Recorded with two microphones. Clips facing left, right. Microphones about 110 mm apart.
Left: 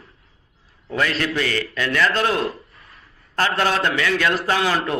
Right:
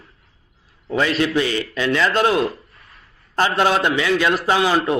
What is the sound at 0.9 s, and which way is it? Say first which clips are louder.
A man's voice: right 3 dB; 20° right (ahead or behind).